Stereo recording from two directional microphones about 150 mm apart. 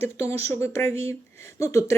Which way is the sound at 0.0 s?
20° left (ahead or behind).